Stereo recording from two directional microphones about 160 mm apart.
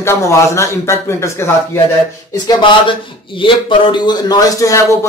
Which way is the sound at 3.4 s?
30° left (ahead or behind).